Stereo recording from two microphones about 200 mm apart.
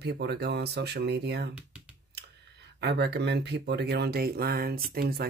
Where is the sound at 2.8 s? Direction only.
55° right (ahead or behind).